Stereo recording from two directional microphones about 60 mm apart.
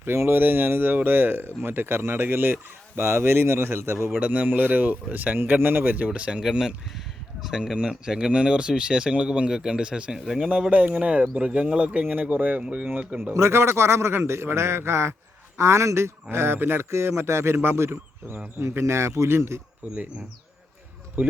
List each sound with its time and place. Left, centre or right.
0.0 s speech: right
4.2 s speech: right
6.1 s speech: centre
10.2 s speech: centre
10.7 s speech: right
13.3 s a man's voice: right
16.3 s a man's voice: right
19.8 s speech: right
21.2 s speech: right